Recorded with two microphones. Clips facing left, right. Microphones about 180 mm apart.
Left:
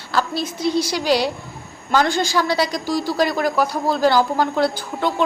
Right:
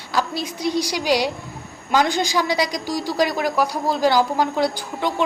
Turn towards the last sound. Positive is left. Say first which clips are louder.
# left 2 dB
turn(degrees=-15)  # may be behind; listen again after turning